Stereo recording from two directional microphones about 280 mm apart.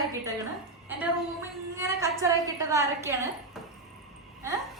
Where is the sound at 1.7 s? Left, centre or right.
Centre.